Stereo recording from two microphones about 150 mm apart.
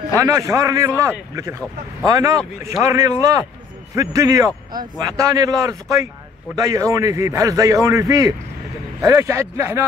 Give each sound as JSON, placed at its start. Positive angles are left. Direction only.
{"t": 0.2, "sound": "a man's voice", "side_deg": -20}